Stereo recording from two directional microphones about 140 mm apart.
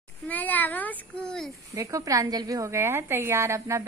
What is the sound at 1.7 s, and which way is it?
A woman's voice, 20° right (ahead or behind).